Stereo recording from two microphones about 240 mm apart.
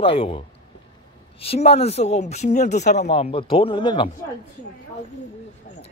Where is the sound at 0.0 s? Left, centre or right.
Left.